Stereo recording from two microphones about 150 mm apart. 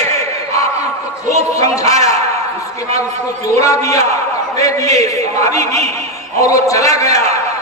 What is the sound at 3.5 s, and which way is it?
A man's voice, 20° left (ahead or behind).